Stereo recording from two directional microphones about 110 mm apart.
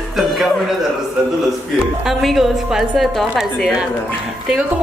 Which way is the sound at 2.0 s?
Centre (ahead or behind).